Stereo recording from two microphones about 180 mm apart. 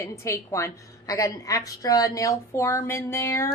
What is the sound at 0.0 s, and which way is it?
A woman's voice, 15° left (ahead or behind).